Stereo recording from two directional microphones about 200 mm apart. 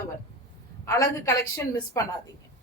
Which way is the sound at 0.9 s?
15° left (ahead or behind).